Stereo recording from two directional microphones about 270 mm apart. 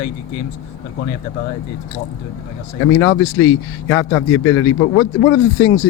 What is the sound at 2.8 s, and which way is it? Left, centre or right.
A man's voice, left.